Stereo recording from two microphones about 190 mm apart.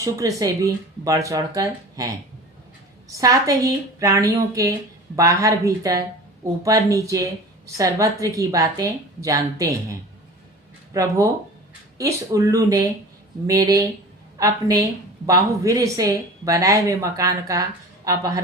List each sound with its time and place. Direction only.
0.0 s speech: 15° right (ahead or behind)
3.2 s speech: 15° right (ahead or behind)